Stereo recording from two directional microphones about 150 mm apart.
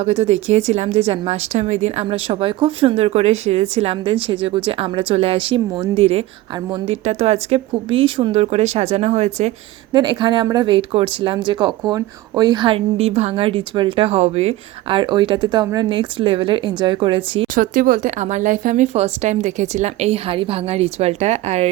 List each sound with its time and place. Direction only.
0.0 s speech: 45° right (ahead or behind)
6.0 s speech: 40° right (ahead or behind)
9.9 s speech: 30° right (ahead or behind)
17.5 s speech: 65° right (ahead or behind)
18.9 s speech: 45° right (ahead or behind)